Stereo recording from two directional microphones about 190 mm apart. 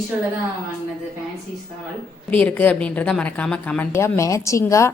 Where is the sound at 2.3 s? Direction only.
10° left (ahead or behind).